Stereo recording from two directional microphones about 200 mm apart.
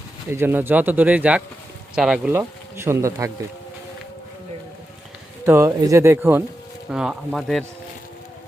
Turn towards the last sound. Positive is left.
turn(degrees=0)  # may be behind; listen again after turning